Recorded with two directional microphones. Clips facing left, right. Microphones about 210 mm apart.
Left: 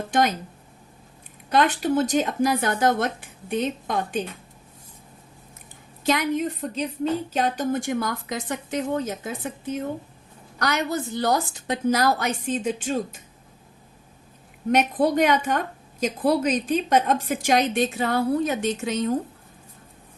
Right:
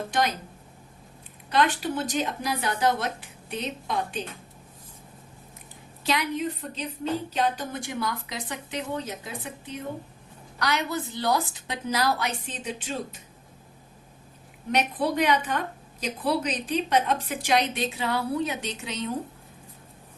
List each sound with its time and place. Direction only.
0.1 s a woman's voice: 45° left (ahead or behind)
1.5 s a woman's voice: 45° left (ahead or behind)
6.1 s a woman's voice: 45° left (ahead or behind)
14.7 s a woman's voice: 45° left (ahead or behind)